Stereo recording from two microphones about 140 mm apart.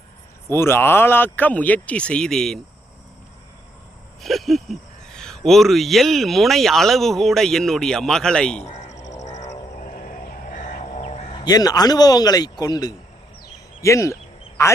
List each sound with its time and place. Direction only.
0.5 s speech: 15° left (ahead or behind)
4.2 s speech: centre (ahead or behind)
8.6 s crow: 55° left (ahead or behind)
8.9 s crow: 25° left (ahead or behind)
9.1 s a sound: 55° left (ahead or behind)
10.1 s a sound: 65° left (ahead or behind)
11.4 s speech: 30° left (ahead or behind)